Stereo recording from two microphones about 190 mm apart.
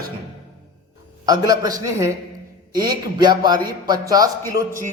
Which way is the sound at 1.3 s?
20° right (ahead or behind).